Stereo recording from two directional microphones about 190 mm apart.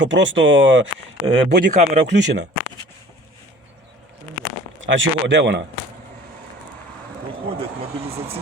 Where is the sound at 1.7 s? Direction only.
40° right (ahead or behind).